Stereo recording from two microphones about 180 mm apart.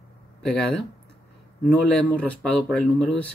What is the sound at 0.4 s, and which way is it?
Speech, 5° left (ahead or behind).